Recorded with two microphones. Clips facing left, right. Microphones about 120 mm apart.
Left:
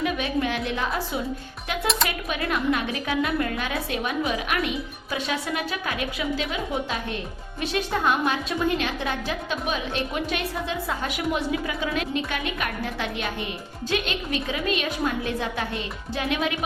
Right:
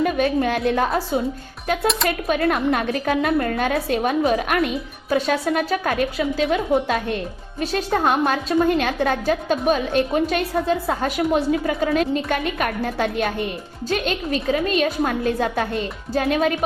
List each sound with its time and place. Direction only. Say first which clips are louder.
0.0 s a woman's voice: right 6 dB; 45° right (ahead or behind)
6.5 s a woman's voice: right 9 dB; 55° right (ahead or behind)
7.6 s a woman's voice: right 4 dB; 40° right (ahead or behind)